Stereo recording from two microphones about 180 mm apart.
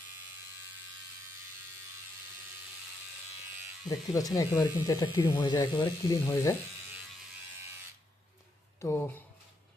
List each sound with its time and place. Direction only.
3.8 s speech: 20° left (ahead or behind)
8.8 s speech: 15° left (ahead or behind)